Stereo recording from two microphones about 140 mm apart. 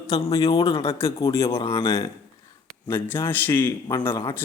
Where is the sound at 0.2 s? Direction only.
30° left (ahead or behind).